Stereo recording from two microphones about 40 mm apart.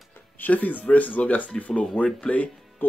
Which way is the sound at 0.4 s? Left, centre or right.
Left.